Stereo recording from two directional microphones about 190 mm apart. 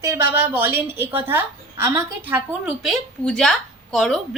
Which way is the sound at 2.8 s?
5° left (ahead or behind).